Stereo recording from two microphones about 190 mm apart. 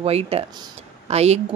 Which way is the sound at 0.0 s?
30° right (ahead or behind).